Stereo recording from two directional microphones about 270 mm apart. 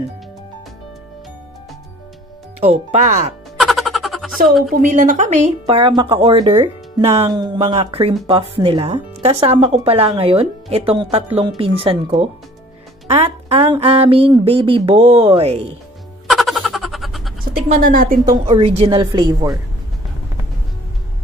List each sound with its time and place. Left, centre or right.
2.6 s speech: right
3.5 s a sound: centre
4.8 s speech: right
16.3 s a sound: centre
17.9 s speech: right
18.3 s a woman's voice: right